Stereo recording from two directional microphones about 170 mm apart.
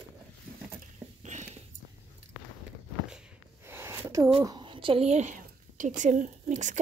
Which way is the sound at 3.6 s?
15° right (ahead or behind).